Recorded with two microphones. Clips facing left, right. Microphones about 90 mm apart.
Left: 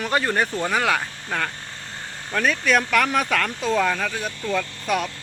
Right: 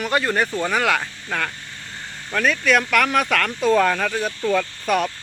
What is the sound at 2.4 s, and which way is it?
Speech, 35° left (ahead or behind).